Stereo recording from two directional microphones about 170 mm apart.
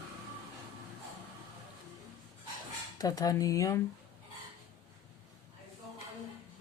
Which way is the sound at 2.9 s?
20° left (ahead or behind).